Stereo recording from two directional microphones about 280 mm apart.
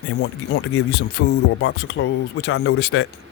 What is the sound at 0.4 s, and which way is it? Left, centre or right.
Speech, left.